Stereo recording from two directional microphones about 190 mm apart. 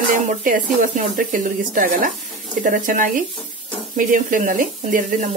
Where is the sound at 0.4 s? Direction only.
45° right (ahead or behind).